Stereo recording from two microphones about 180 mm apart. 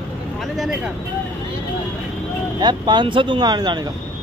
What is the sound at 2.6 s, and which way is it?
Speech, 25° right (ahead or behind).